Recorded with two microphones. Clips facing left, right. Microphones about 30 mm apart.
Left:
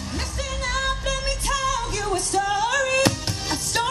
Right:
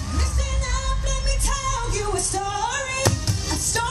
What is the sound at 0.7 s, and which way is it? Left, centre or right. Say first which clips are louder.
Music: left 4 dB; left.